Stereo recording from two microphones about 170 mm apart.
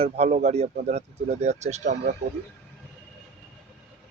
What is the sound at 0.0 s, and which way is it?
Speech, 40° right (ahead or behind).